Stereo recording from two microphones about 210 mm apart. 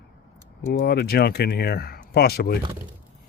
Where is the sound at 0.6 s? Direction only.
50° left (ahead or behind).